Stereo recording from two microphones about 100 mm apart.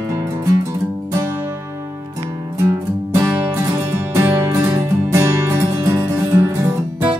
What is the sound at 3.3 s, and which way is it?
Music, 20° right (ahead or behind).